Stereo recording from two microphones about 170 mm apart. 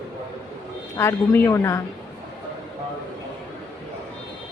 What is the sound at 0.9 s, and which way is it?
Speech, 15° left (ahead or behind).